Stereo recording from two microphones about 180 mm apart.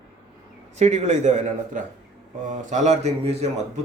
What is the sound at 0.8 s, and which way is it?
A man's voice, 40° right (ahead or behind).